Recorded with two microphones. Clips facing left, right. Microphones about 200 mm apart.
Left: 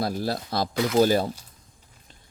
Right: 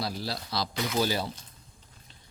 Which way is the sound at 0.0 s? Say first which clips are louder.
Left 7 dB; 50° left (ahead or behind).